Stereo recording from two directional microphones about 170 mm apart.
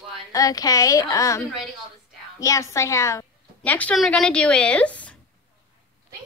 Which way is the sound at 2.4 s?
20° left (ahead or behind).